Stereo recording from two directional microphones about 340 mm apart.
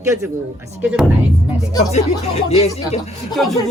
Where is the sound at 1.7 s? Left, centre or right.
Centre.